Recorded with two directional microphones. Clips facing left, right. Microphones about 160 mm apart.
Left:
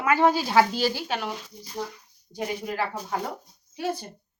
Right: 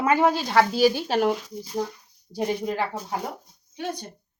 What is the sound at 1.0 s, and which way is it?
Speech, 45° right (ahead or behind).